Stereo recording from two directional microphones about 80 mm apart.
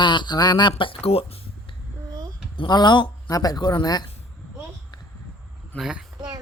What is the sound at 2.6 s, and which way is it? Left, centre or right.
Speech, left.